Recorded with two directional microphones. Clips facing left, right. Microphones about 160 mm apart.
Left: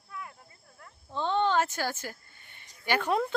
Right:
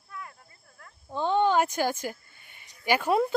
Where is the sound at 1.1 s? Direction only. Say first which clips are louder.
Right 3 dB; 10° right (ahead or behind).